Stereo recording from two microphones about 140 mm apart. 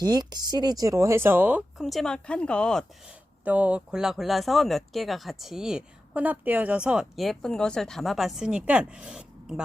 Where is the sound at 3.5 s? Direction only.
10° right (ahead or behind).